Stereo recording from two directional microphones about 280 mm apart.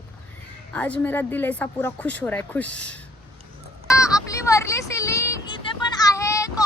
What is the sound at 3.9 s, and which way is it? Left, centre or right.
Vehicle, centre.